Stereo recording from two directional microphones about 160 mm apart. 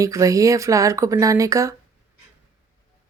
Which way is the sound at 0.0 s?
20° right (ahead or behind).